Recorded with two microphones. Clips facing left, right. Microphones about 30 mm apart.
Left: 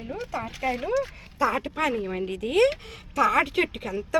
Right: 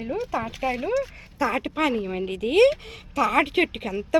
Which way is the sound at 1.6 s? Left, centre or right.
Right.